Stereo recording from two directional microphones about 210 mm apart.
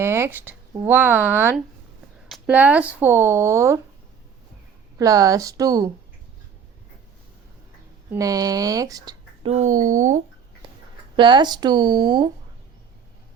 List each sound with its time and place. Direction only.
0.0 s speech: 10° right (ahead or behind)
4.9 s speech: 15° right (ahead or behind)
8.1 s speech: 15° right (ahead or behind)
9.5 s speech: 35° right (ahead or behind)
11.2 s speech: 20° right (ahead or behind)